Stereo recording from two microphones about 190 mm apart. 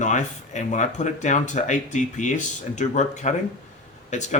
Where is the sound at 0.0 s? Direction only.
40° left (ahead or behind).